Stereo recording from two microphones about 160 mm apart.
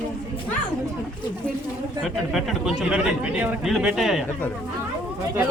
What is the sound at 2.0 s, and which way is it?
A man's voice, centre (ahead or behind).